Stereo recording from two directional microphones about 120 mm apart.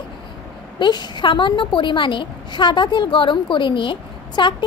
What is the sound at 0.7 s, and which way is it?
A woman's voice, 40° left (ahead or behind).